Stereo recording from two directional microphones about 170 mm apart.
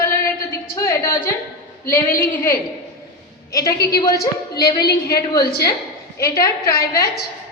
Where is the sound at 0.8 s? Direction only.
15° left (ahead or behind).